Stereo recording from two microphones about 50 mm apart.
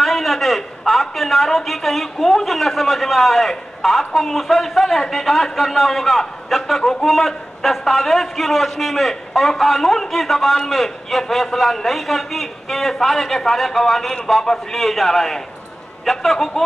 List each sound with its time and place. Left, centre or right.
0.0 s a man's voice: centre